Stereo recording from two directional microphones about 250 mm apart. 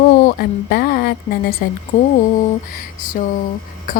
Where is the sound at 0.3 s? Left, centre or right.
Left.